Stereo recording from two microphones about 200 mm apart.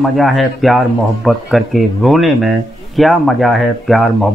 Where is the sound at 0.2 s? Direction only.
Centre (ahead or behind).